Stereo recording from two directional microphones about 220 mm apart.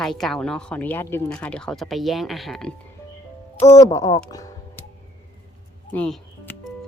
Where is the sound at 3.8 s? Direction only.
15° left (ahead or behind).